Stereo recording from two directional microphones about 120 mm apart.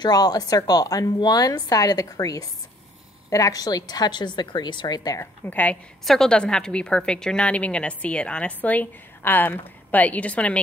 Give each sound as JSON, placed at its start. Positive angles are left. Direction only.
{"t": 0.0, "sound": "speech", "side_deg": 35}
{"t": 5.2, "sound": "a woman's voice", "side_deg": 15}